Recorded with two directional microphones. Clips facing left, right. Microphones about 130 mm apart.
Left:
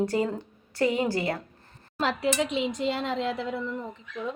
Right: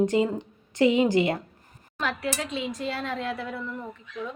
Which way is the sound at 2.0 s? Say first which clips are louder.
Left 4 dB; 30° left (ahead or behind).